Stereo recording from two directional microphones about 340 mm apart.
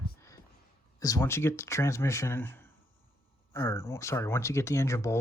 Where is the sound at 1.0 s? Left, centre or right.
Centre.